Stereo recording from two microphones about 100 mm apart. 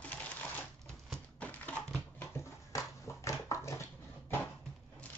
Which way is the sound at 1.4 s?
15° left (ahead or behind).